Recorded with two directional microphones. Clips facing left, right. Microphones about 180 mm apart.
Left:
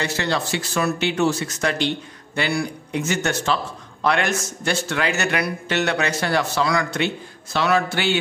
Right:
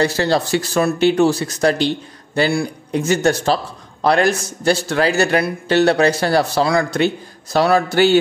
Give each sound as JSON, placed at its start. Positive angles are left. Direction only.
{"t": 0.0, "sound": "speech", "side_deg": -35}